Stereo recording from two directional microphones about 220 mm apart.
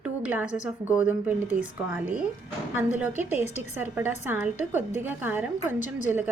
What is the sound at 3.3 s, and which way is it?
Speech, 30° left (ahead or behind).